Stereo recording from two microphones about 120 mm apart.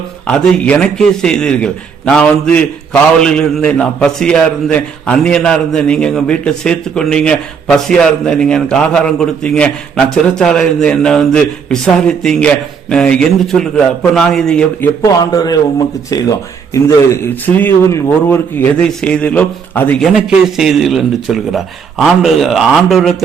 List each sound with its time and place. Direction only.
0.3 s a man's voice: 10° left (ahead or behind)
15.0 s a man's voice: 30° left (ahead or behind)
18.9 s a man's voice: 5° left (ahead or behind)
20.0 s speech: 5° right (ahead or behind)